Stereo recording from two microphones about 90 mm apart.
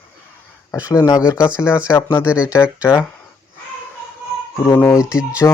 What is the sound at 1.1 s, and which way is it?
Speech, 40° left (ahead or behind).